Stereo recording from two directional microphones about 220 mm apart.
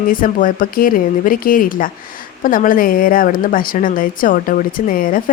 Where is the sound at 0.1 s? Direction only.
40° left (ahead or behind).